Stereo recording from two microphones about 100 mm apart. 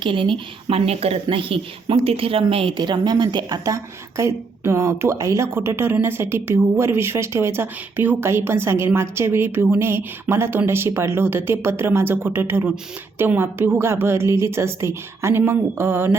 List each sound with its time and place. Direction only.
0.0 s a woman's voice: 55° right (ahead or behind)
2.7 s a woman's voice: 50° right (ahead or behind)
4.2 s a woman's voice: 25° right (ahead or behind)